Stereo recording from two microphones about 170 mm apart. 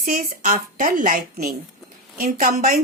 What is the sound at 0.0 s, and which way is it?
A woman's voice, 50° right (ahead or behind).